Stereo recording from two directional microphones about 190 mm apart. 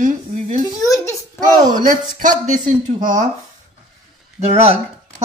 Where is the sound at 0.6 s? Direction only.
20° left (ahead or behind).